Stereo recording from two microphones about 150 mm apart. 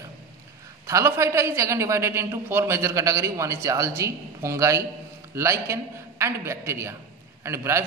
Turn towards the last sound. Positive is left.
turn(degrees=-20)  # may be behind; listen again after turning